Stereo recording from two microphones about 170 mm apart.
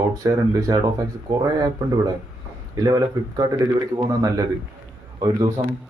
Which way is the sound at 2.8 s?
25° right (ahead or behind).